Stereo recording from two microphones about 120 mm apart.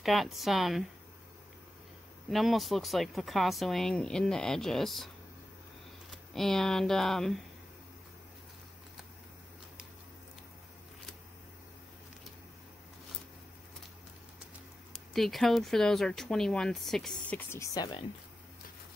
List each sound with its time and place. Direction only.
0.0 s speech: centre (ahead or behind)
2.2 s speech: centre (ahead or behind)
6.3 s speech: 5° left (ahead or behind)
15.1 s speech: centre (ahead or behind)
17.5 s speech: 30° left (ahead or behind)